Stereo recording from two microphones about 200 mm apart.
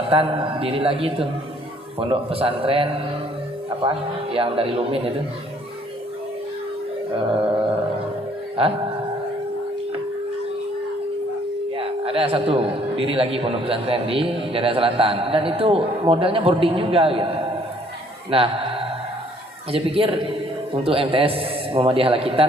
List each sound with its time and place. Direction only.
0.1 s a man's voice: 30° right (ahead or behind)
7.2 s mantra: 25° right (ahead or behind)
11.8 s a man's voice: 30° right (ahead or behind)